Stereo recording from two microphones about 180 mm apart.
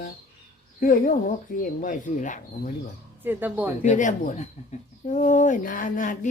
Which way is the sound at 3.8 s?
45° left (ahead or behind).